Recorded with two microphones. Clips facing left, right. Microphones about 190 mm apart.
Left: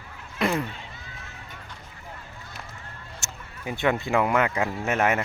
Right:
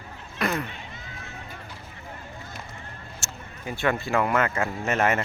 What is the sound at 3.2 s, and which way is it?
Speech, 20° left (ahead or behind).